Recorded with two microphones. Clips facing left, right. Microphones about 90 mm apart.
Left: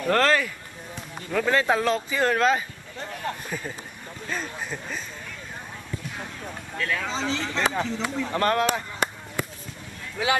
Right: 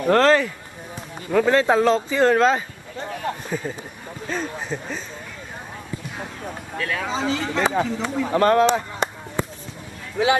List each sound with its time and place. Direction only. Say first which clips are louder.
0.0 s speech: right 5 dB; 20° right (ahead or behind)
6.1 s speech: right 4 dB; 20° right (ahead or behind)